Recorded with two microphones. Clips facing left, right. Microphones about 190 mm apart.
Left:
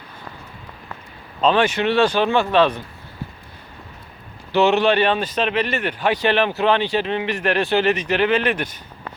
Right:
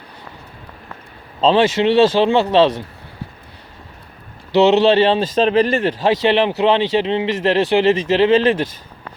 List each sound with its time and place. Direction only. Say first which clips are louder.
1.4 s speech: right 4 dB; 25° right (ahead or behind)
4.6 s speech: right 4 dB; 25° right (ahead or behind)
6.2 s speech: right 3 dB; 20° right (ahead or behind)